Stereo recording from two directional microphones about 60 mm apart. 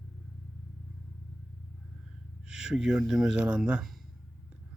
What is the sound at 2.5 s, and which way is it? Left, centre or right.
Speech, centre.